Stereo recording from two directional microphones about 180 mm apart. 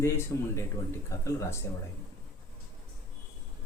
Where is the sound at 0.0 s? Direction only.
15° left (ahead or behind).